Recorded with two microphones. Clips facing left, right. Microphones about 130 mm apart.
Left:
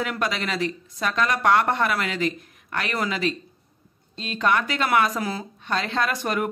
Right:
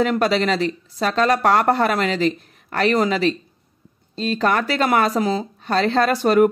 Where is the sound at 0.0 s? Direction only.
30° right (ahead or behind).